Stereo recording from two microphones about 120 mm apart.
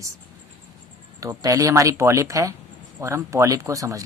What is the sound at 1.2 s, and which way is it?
Speech, 30° right (ahead or behind).